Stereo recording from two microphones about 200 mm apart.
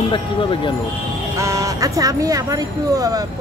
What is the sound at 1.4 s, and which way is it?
Speech, 15° right (ahead or behind).